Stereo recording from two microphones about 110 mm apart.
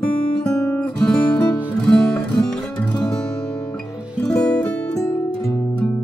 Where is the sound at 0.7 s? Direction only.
10° left (ahead or behind).